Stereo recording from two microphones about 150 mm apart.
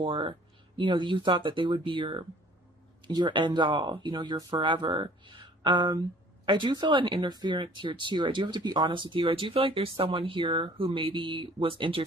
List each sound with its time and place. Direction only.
0.0 s speech: 35° right (ahead or behind)